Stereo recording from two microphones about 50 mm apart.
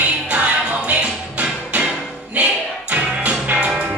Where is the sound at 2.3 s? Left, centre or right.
Right.